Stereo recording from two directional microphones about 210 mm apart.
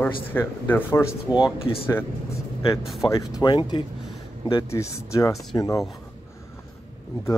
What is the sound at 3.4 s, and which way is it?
A man's voice, 20° left (ahead or behind).